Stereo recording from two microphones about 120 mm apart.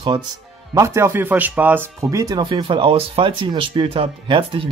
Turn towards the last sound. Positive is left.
turn(degrees=-50)  # may be behind; listen again after turning